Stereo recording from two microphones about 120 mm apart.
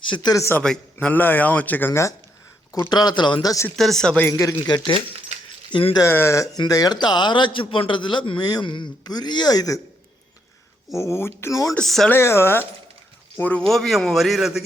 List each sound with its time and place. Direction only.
0.1 s speech: 35° left (ahead or behind)
0.6 s a man's voice: 10° left (ahead or behind)
2.9 s speech: 35° left (ahead or behind)
3.8 s a man's voice: 5° left (ahead or behind)
4.3 s speech: 25° left (ahead or behind)
6.1 s speech: 20° left (ahead or behind)
10.9 s speech: 25° left (ahead or behind)
11.7 s a man's voice: 5° left (ahead or behind)
12.1 s a man's voice: 20° left (ahead or behind); by 14.6 s centre (ahead or behind)